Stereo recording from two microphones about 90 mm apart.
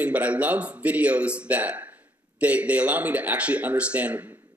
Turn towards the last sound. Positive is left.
turn(degrees=-15)  # may be behind; listen again after turning